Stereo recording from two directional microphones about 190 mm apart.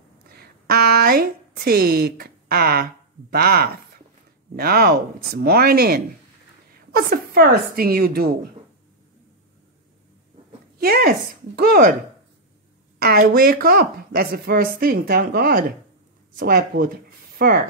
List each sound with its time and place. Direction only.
0.3 s a woman's voice: 55° right (ahead or behind)
10.8 s speech: 50° right (ahead or behind)
13.2 s speech: 50° right (ahead or behind)